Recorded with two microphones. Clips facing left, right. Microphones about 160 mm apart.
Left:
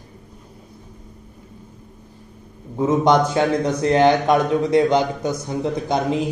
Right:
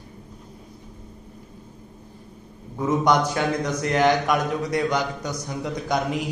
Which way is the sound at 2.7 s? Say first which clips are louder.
Left 4 dB; 25° left (ahead or behind).